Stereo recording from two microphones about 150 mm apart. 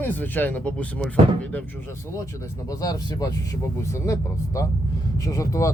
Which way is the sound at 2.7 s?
25° left (ahead or behind).